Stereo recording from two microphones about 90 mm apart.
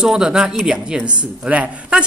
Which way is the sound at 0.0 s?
5° right (ahead or behind).